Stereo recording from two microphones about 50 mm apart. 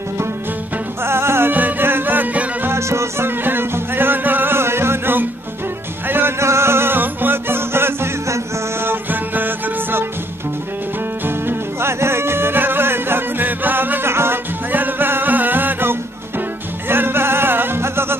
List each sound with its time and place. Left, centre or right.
1.0 s music: right
1.5 s music: right
2.7 s music: right
3.3 s music: right
6.4 s music: right
8.8 s music: right
11.2 s music: right
14.7 s music: right